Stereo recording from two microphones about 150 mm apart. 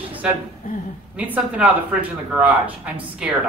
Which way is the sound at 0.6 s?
65° left (ahead or behind).